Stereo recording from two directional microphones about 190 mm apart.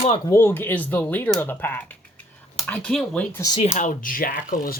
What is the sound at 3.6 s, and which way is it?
Speech, 35° left (ahead or behind).